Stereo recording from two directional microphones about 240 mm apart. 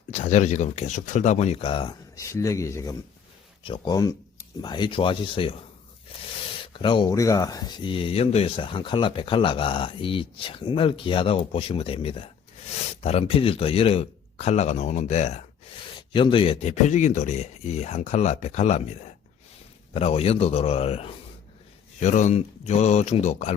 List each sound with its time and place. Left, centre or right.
0.1 s speech: left
6.7 s speech: centre